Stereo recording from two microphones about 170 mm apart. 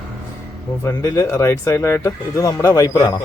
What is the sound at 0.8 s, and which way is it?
Speech, 20° left (ahead or behind).